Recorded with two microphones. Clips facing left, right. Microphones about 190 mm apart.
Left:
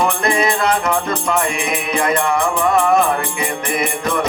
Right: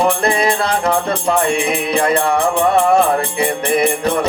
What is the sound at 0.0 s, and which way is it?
Music, 35° right (ahead or behind).